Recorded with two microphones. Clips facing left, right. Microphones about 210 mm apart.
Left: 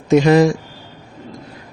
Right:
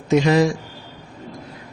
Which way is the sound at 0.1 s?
50° left (ahead or behind).